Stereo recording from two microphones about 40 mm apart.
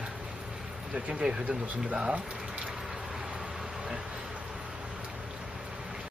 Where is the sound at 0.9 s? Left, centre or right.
Centre.